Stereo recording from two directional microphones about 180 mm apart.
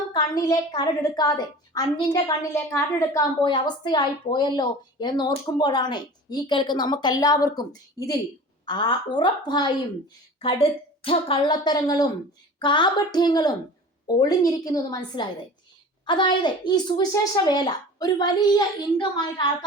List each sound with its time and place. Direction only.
0.1 s a woman's voice: 20° left (ahead or behind)